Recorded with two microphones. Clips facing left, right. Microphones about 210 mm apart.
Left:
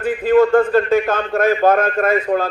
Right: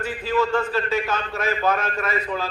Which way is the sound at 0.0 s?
55° left (ahead or behind).